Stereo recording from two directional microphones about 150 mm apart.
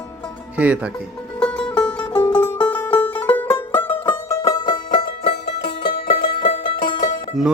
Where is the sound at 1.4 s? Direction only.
5° left (ahead or behind).